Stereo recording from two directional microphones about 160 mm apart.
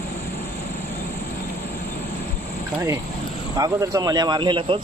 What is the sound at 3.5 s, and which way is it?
A man's voice, 20° right (ahead or behind).